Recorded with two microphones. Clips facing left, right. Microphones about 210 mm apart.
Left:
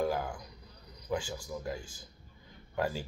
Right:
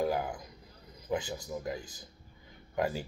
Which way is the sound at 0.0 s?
20° right (ahead or behind).